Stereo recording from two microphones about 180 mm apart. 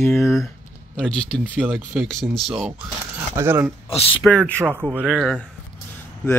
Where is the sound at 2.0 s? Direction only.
Centre (ahead or behind).